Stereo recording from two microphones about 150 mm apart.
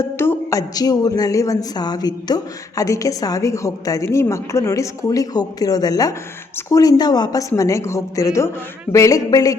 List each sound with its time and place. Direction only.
0.0 s a woman's voice: 15° left (ahead or behind)